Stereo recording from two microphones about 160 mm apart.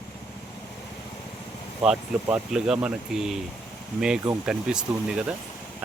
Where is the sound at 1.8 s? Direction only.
5° right (ahead or behind).